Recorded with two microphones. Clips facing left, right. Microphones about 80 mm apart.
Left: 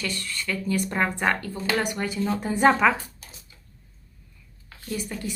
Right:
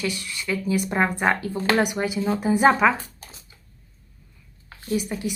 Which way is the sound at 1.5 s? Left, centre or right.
Right.